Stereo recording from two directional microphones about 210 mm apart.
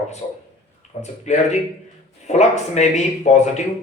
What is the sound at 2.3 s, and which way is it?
A man's voice, 35° left (ahead or behind).